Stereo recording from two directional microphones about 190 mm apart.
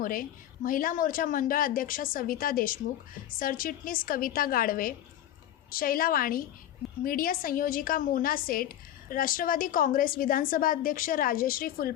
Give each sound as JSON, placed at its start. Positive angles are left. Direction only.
{"t": 0.0, "sound": "a woman's voice", "side_deg": 50}